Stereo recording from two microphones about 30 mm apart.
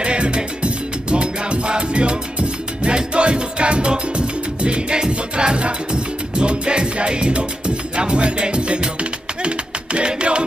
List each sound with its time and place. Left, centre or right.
0.0 s music: right
9.9 s music: right